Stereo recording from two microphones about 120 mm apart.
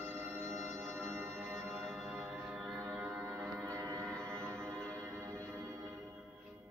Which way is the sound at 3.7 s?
25° right (ahead or behind).